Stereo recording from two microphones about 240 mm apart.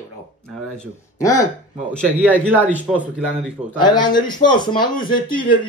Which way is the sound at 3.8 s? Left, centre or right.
Centre.